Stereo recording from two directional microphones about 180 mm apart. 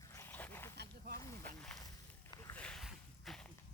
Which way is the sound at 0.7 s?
65° right (ahead or behind).